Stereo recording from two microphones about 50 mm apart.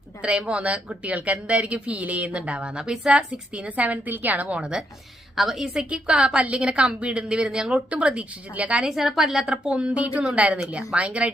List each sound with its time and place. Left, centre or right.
0.2 s speech: right
3.8 s a woman's voice: right
4.4 s speech: right
5.4 s speech: centre; by 8.9 s right
8.9 s speech: centre
9.5 s speech: right